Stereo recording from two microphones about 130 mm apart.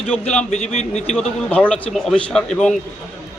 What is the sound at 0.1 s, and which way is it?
Speech, 10° left (ahead or behind).